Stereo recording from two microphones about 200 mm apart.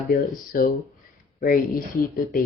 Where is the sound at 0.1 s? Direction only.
45° left (ahead or behind).